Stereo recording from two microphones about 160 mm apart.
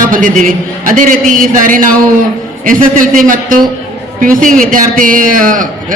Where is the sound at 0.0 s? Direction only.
55° right (ahead or behind).